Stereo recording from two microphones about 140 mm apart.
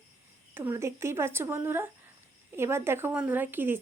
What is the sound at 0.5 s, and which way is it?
Speech, 15° right (ahead or behind).